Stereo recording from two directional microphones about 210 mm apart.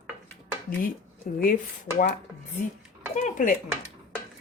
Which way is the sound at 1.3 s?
40° left (ahead or behind).